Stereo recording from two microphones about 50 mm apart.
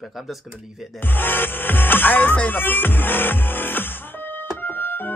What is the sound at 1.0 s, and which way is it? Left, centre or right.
Music, left.